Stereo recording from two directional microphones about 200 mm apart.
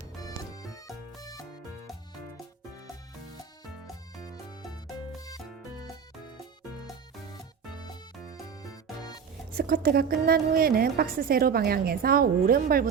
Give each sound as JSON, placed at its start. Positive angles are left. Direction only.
{"t": 0.2, "sound": "music", "side_deg": 15}
{"t": 7.3, "sound": "music", "side_deg": 20}
{"t": 9.6, "sound": "a woman's voice", "side_deg": -45}